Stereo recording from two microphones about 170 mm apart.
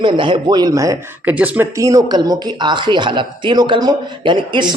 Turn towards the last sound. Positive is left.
turn(degrees=-25)  # may be behind; listen again after turning